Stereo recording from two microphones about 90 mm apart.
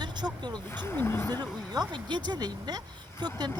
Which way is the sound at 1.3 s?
50° right (ahead or behind).